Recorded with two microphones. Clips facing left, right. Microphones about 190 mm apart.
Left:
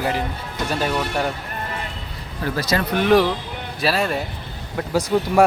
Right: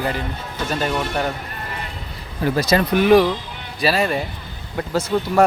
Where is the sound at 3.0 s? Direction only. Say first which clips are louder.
Right 1 dB; centre (ahead or behind).